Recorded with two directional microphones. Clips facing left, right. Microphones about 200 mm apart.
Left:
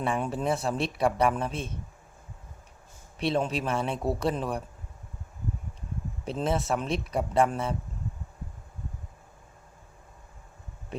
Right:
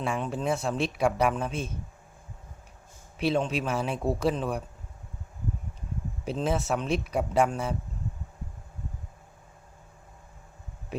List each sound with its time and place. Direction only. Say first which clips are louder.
0.0 s speech: left 1 dB; centre (ahead or behind)
3.2 s speech: right 1 dB; centre (ahead or behind)
6.2 s speech: even; centre (ahead or behind)